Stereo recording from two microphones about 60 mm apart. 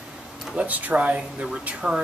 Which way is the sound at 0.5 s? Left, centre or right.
Right.